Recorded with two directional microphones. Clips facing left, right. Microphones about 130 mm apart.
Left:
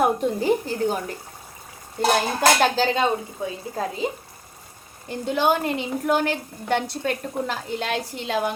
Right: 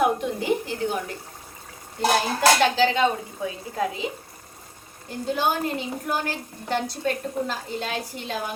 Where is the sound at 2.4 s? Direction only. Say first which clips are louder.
Right 1 dB; 40° left (ahead or behind).